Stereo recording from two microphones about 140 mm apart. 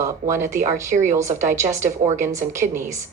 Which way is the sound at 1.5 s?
20° right (ahead or behind).